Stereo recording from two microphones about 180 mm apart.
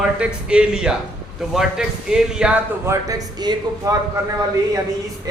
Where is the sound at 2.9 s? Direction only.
20° right (ahead or behind).